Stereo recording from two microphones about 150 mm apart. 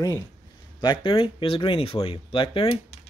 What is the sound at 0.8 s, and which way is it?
Speech, 35° left (ahead or behind).